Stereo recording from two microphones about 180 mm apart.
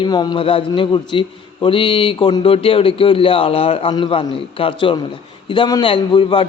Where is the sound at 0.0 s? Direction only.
25° left (ahead or behind).